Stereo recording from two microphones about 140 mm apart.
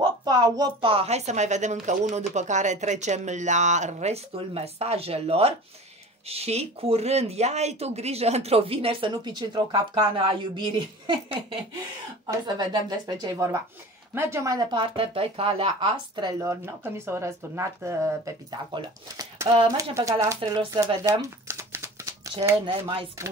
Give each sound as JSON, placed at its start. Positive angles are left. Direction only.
{"t": 0.2, "sound": "speech", "side_deg": -30}
{"t": 0.8, "sound": "speech", "side_deg": -45}
{"t": 22.7, "sound": "speech", "side_deg": -40}